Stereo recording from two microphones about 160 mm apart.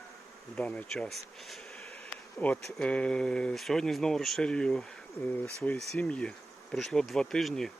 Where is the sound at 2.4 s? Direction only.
5° left (ahead or behind).